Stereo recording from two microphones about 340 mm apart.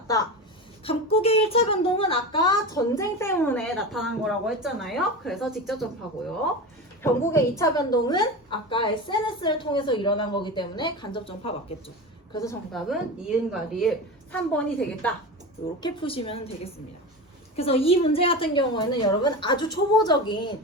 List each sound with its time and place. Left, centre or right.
0.9 s speech: centre
7.0 s speech: centre
15.8 s speech: centre
17.6 s speech: centre